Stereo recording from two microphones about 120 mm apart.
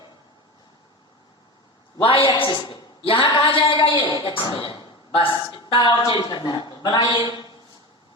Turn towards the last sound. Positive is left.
turn(degrees=45)  # may be behind; listen again after turning